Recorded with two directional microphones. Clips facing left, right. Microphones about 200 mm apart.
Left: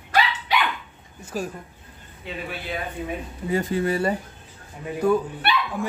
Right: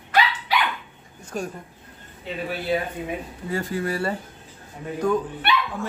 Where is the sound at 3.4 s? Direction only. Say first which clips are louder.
Left 4 dB; 20° left (ahead or behind).